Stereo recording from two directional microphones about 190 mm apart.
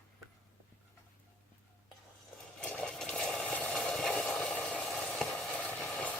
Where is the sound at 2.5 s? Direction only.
5° left (ahead or behind).